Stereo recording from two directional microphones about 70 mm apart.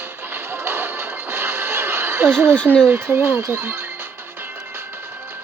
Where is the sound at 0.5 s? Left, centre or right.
Right.